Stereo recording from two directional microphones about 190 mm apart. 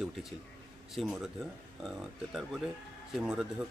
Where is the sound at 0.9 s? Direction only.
Centre (ahead or behind).